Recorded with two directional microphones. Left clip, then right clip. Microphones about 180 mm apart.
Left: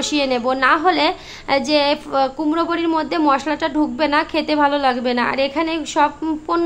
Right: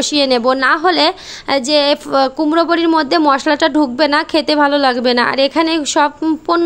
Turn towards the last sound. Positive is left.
turn(degrees=-35)  # may be behind; listen again after turning